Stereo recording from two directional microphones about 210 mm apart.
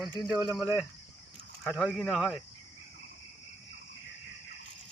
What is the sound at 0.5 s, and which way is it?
Speech, centre (ahead or behind).